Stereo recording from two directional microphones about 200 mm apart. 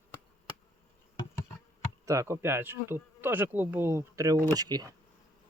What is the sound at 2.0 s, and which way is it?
Speech, 15° right (ahead or behind).